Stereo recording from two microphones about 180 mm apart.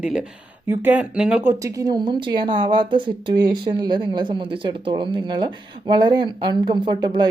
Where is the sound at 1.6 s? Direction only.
20° right (ahead or behind).